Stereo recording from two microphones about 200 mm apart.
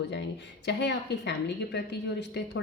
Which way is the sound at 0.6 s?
60° left (ahead or behind).